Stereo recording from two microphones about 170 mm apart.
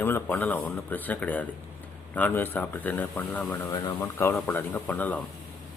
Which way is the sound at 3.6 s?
25° left (ahead or behind).